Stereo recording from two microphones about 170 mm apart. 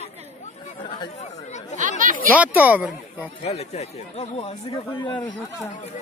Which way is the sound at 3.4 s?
40° left (ahead or behind).